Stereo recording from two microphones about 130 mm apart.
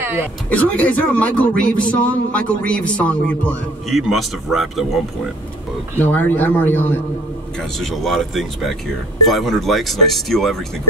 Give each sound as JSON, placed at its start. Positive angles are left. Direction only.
{"t": 0.0, "sound": "a sound", "side_deg": -15}
{"t": 0.5, "sound": "a man's voice", "side_deg": 10}
{"t": 3.9, "sound": "speech", "side_deg": 0}
{"t": 5.9, "sound": "a man's voice", "side_deg": 15}
{"t": 7.5, "sound": "speech", "side_deg": 0}